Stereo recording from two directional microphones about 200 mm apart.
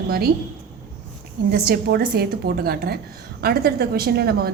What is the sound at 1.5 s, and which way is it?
A woman's voice, 50° right (ahead or behind).